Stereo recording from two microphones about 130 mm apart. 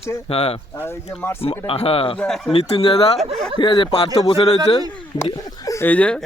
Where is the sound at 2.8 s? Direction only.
45° left (ahead or behind).